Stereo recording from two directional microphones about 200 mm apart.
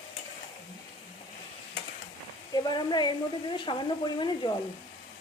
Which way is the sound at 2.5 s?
20° left (ahead or behind).